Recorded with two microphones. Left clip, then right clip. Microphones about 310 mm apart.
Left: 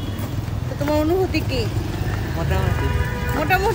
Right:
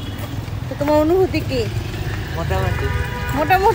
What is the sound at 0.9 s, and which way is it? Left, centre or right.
Speech, centre.